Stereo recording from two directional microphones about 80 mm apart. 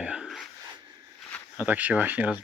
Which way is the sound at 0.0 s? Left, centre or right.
Centre.